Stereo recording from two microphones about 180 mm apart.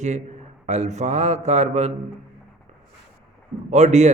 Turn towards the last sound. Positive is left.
turn(degrees=-40)  # may be behind; listen again after turning